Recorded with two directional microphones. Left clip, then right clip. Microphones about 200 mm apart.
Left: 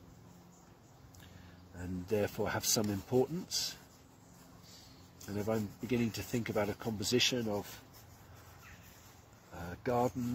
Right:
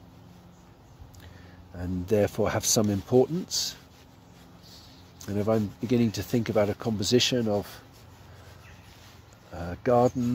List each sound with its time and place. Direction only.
1.8 s speech: 30° right (ahead or behind)
5.2 s speech: 30° right (ahead or behind)
9.5 s speech: 35° right (ahead or behind)